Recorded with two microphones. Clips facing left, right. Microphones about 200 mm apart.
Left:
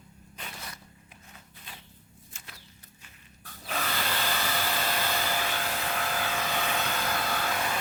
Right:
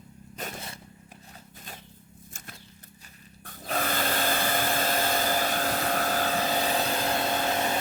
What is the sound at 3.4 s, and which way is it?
Tools, 45° right (ahead or behind).